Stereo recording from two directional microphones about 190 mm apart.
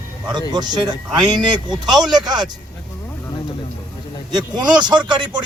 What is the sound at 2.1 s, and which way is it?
Speech, 20° right (ahead or behind).